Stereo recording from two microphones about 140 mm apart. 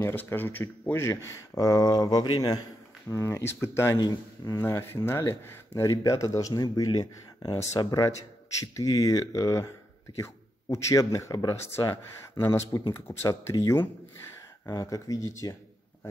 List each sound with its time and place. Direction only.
0.0 s speech: 15° left (ahead or behind)